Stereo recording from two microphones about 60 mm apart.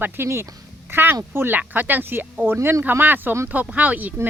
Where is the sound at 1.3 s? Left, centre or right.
Right.